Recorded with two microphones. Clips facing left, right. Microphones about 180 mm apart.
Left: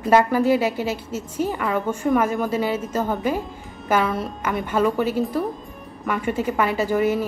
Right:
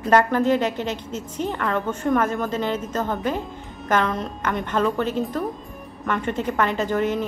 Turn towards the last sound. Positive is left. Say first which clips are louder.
# left 2 dB
turn(degrees=10)  # may be behind; listen again after turning